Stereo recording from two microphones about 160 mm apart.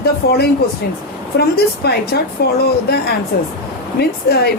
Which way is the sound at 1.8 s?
80° left.